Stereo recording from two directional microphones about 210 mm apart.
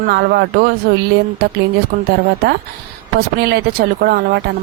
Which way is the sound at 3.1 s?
50° right (ahead or behind).